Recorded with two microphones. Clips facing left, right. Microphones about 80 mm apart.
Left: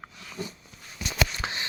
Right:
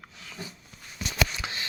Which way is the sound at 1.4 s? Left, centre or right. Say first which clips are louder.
Left 2 dB; left.